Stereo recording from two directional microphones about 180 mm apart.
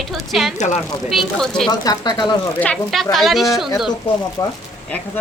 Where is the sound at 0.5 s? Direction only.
40° left (ahead or behind).